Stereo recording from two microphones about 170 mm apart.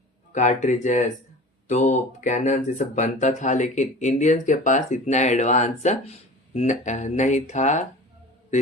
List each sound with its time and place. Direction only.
0.3 s speech: 45° left (ahead or behind)